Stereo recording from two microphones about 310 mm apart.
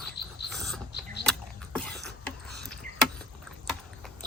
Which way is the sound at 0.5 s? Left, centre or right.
Centre.